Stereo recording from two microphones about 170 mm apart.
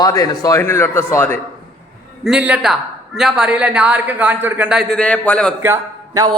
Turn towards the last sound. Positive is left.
turn(degrees=-15)  # may be behind; listen again after turning